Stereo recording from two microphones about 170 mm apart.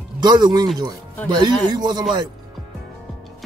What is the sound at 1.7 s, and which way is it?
Speech, 25° right (ahead or behind).